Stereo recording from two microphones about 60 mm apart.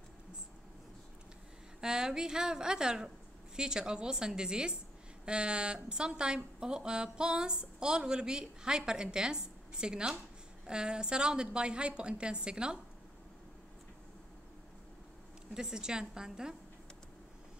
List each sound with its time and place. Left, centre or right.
1.8 s speech: centre
15.5 s speech: centre